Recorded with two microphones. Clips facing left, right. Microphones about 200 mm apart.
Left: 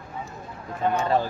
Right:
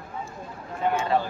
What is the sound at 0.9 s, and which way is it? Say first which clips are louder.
Speech: left 2 dB; 40° left (ahead or behind).